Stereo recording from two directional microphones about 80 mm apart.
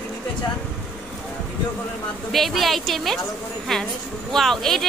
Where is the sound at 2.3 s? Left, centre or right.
Centre.